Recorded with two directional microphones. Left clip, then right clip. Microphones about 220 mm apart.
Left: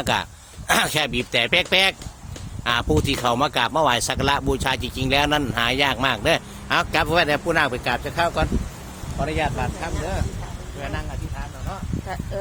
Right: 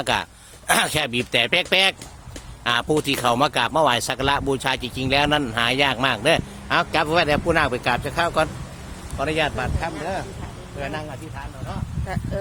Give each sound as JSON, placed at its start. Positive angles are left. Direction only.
{"t": 0.0, "sound": "speech", "side_deg": -10}
{"t": 9.2, "sound": "speech", "side_deg": -40}